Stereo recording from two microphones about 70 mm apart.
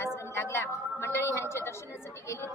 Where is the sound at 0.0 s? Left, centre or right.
Left.